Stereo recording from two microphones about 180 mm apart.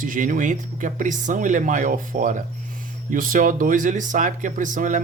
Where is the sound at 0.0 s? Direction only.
50° right (ahead or behind).